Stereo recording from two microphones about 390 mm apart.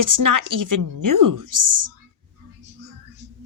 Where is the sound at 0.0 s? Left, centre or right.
Right.